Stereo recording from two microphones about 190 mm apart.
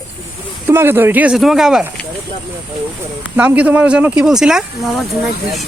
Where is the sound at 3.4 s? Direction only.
10° right (ahead or behind).